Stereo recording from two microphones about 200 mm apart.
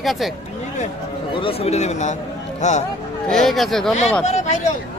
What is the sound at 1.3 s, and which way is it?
Speech, 25° left (ahead or behind).